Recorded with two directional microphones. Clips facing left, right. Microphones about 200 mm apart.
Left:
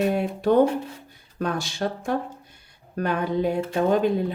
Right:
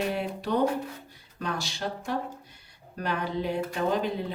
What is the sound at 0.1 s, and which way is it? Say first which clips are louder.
Speech: left 8 dB; 50° left (ahead or behind).